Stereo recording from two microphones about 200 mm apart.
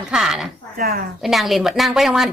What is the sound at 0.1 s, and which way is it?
Speech, centre (ahead or behind).